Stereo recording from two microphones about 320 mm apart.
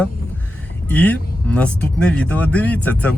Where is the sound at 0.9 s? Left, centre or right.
Centre.